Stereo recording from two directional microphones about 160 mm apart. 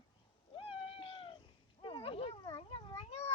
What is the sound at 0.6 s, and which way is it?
Cat, 35° left (ahead or behind).